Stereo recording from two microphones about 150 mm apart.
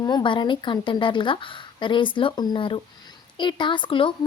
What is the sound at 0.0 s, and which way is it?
A woman's voice, 30° left (ahead or behind).